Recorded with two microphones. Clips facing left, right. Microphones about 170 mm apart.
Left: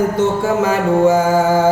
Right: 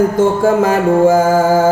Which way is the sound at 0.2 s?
50° right (ahead or behind).